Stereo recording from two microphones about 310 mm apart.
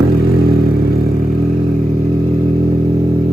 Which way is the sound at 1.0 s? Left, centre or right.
Right.